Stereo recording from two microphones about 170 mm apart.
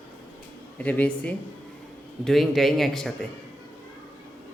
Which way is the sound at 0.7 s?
10° left (ahead or behind).